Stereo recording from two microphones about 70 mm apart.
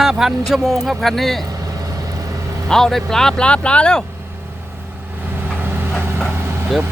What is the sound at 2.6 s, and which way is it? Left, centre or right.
Speech, centre.